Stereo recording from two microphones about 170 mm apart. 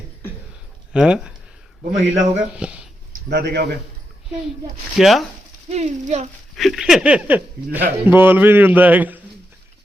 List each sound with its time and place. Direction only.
0.9 s speech: 5° right (ahead or behind)
1.8 s a man's voice: 45° right (ahead or behind)
2.6 s speech: 5° right (ahead or behind)
3.2 s a man's voice: 70° right (ahead or behind)
4.9 s speech: centre (ahead or behind)
5.6 s speech: 40° right (ahead or behind)
6.6 s speech: centre (ahead or behind)